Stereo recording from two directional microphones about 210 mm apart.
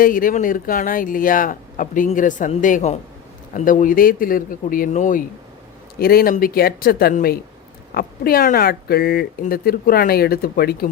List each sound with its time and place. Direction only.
0.0 s speech: 40° left (ahead or behind)